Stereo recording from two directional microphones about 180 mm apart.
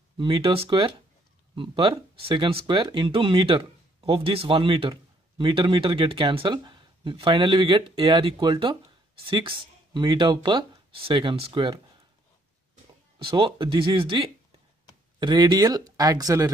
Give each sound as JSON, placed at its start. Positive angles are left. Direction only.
{"t": 0.2, "sound": "speech", "side_deg": -30}
{"t": 13.2, "sound": "speech", "side_deg": -30}